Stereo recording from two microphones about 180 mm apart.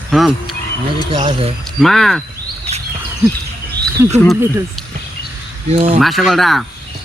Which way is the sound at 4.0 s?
15° right (ahead or behind).